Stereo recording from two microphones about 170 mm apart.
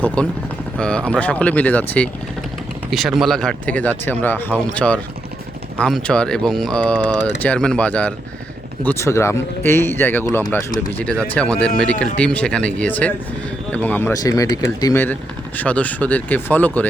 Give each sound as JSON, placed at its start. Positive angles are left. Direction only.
{"t": 0.0, "sound": "speech", "side_deg": 10}
{"t": 2.9, "sound": "speech", "side_deg": 0}
{"t": 15.0, "sound": "speech", "side_deg": 10}